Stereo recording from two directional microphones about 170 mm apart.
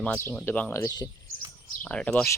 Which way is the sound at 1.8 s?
5° left (ahead or behind).